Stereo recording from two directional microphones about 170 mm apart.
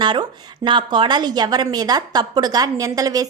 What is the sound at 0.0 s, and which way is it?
A woman's voice, 25° right (ahead or behind).